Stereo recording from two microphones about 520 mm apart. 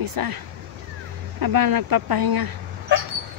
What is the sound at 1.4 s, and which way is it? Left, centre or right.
Speech, right.